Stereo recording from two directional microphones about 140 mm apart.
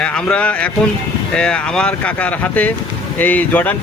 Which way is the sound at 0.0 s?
10° left (ahead or behind).